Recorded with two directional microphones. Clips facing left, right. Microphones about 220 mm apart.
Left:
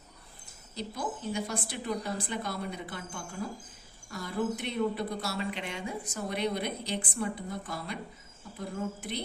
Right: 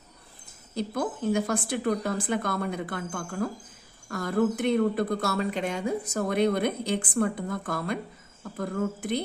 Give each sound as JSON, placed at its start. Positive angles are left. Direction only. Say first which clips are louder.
{"t": 0.8, "sound": "speech", "louder": "right 7 dB", "side_deg": -50}